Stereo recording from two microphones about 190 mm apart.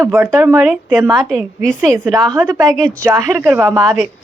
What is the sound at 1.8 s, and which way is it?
Speech, 10° right (ahead or behind).